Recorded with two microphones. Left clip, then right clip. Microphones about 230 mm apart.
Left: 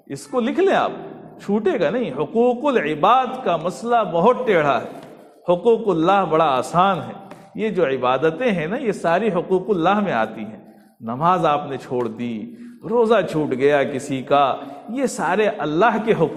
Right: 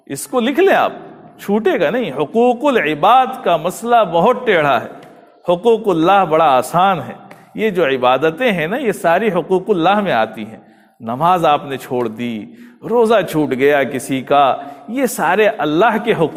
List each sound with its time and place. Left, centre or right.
0.1 s speech: right